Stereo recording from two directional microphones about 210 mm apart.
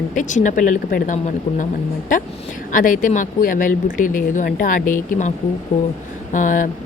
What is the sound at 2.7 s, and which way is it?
Speech, 40° left (ahead or behind).